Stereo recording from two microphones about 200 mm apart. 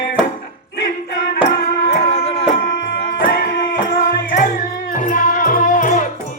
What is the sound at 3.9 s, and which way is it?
Music, 40° left (ahead or behind).